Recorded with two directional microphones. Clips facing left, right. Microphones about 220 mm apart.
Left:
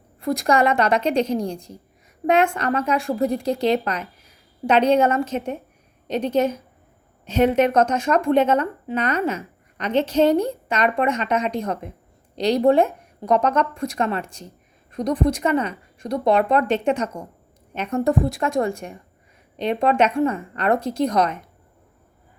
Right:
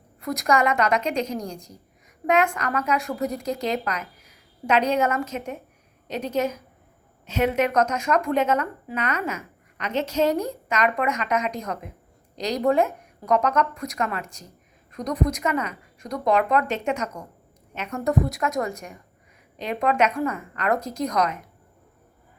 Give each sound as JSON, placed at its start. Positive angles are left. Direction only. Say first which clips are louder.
{"t": 0.2, "sound": "a woman's voice", "louder": "left 3 dB", "side_deg": 30}